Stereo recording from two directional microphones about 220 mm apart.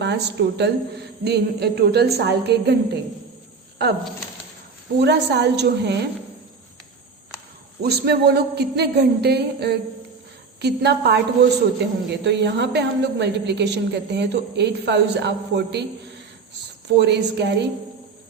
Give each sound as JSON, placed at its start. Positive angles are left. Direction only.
{"t": 0.0, "sound": "a woman's voice", "side_deg": -50}
{"t": 4.9, "sound": "a woman's voice", "side_deg": -50}
{"t": 7.8, "sound": "a woman's voice", "side_deg": -45}
{"t": 17.0, "sound": "a woman's voice", "side_deg": -50}